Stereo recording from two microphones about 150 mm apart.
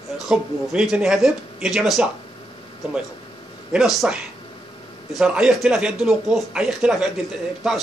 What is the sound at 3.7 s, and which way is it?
Speech, centre (ahead or behind).